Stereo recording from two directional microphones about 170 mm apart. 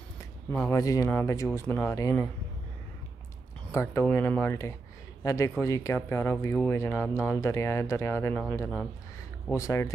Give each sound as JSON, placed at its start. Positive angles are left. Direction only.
{"t": 0.5, "sound": "speech", "side_deg": 10}
{"t": 3.7, "sound": "speech", "side_deg": 15}
{"t": 9.5, "sound": "speech", "side_deg": 15}